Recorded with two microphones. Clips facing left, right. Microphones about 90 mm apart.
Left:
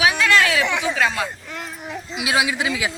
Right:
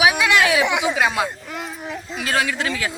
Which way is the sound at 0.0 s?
15° right (ahead or behind).